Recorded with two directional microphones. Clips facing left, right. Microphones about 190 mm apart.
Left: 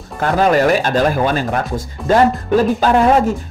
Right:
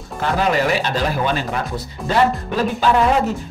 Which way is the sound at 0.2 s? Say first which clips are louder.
Left 5 dB; 45° left (ahead or behind).